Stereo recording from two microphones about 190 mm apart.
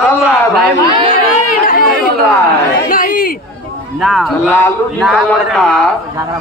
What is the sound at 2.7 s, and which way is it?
Speech, 50° left (ahead or behind).